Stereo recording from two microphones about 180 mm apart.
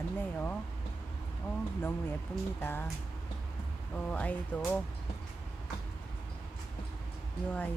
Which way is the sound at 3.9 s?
5° left (ahead or behind).